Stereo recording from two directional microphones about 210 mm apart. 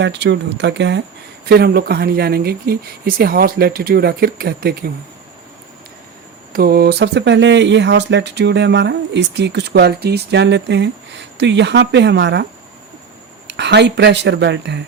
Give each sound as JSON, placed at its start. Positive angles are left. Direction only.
{"t": 0.0, "sound": "speech", "side_deg": -55}
{"t": 6.5, "sound": "speech", "side_deg": -45}
{"t": 13.5, "sound": "speech", "side_deg": -55}